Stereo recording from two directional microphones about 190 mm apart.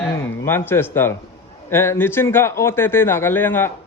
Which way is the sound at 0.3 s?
10° left (ahead or behind).